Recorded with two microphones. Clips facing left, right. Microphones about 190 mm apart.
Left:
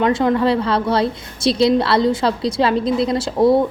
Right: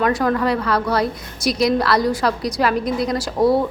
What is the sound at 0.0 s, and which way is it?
A woman's voice, 25° left (ahead or behind).